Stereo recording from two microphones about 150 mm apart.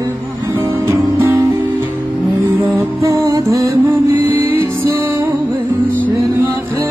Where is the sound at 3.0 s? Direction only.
20° right (ahead or behind).